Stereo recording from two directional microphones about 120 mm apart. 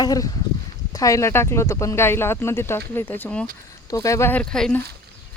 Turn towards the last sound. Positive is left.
turn(degrees=5)  # may be behind; listen again after turning